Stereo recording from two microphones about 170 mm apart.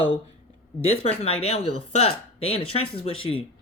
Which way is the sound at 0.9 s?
35° left (ahead or behind).